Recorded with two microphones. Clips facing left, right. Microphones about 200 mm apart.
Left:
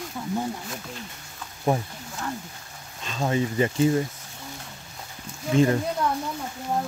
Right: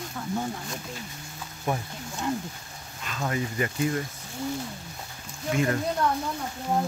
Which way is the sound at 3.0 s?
25° left (ahead or behind).